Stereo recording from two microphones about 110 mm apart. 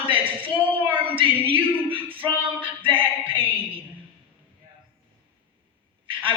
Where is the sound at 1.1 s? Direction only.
55° right (ahead or behind).